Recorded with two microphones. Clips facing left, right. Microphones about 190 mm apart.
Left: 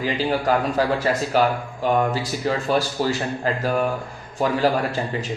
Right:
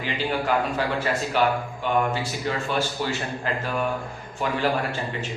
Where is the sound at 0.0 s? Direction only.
40° left (ahead or behind).